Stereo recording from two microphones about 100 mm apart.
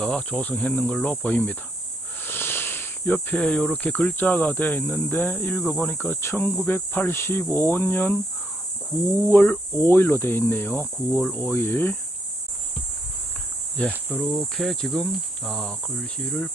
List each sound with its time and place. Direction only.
0.0 s speech: 10° left (ahead or behind)
2.2 s snake: 20° left (ahead or behind)
3.3 s speech: 10° left (ahead or behind)
9.3 s speech: 20° left (ahead or behind)
14.3 s cricket: 5° left (ahead or behind)